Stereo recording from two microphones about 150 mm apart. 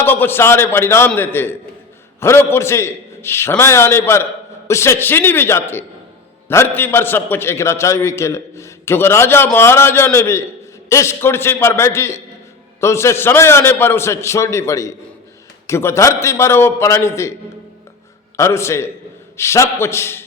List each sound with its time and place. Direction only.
0.0 s a man's voice: 15° left (ahead or behind)
18.3 s a man's voice: 20° left (ahead or behind)